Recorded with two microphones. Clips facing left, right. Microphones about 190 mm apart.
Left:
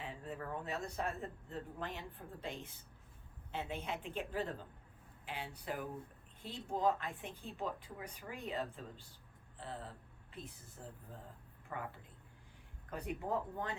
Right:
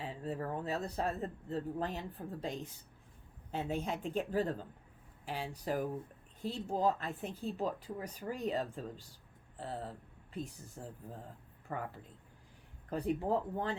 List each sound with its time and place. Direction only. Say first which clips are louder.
0.0 s speech: right 6 dB; 35° right (ahead or behind)
12.9 s speech: right 6 dB; 30° right (ahead or behind)